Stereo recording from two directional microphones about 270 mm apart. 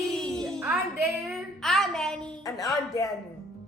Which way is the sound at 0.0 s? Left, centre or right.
Centre.